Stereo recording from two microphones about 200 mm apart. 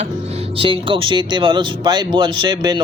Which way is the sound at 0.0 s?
30° right (ahead or behind).